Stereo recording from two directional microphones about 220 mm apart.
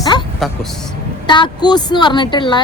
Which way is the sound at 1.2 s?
20° left (ahead or behind).